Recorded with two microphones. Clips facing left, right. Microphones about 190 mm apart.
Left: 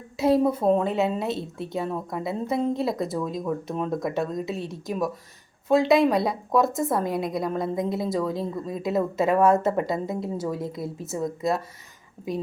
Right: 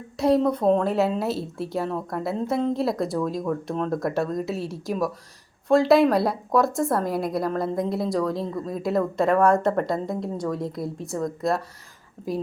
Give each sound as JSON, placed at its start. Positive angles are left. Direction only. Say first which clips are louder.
{"t": 0.2, "sound": "a woman's voice", "louder": "right 1 dB", "side_deg": 5}